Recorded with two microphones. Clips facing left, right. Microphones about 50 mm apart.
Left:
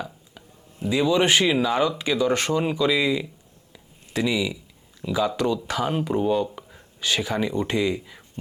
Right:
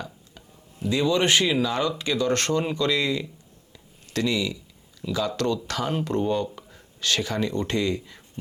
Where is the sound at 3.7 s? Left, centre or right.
Centre.